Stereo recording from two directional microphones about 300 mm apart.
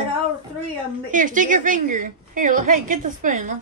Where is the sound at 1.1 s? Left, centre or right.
Right.